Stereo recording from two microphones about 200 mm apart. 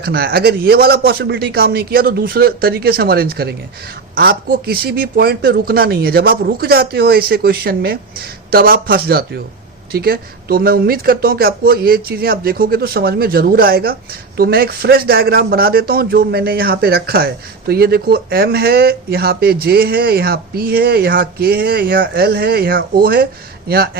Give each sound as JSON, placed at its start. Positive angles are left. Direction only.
{"t": 0.0, "sound": "speech", "side_deg": -50}